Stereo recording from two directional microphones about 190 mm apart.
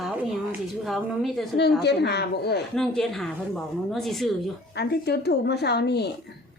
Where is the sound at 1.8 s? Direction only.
60° left (ahead or behind).